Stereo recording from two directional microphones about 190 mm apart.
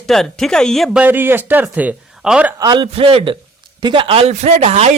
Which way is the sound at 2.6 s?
25° right (ahead or behind).